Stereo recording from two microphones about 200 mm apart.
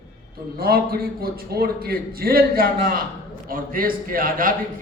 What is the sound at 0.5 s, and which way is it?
A man's voice, 50° right (ahead or behind).